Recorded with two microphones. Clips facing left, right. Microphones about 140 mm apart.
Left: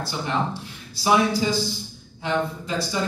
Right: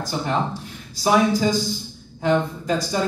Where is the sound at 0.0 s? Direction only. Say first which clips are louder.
Right 2 dB; 40° right (ahead or behind).